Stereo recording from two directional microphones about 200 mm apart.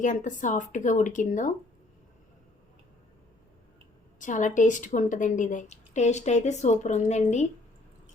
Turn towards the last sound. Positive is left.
turn(degrees=35)  # may be behind; listen again after turning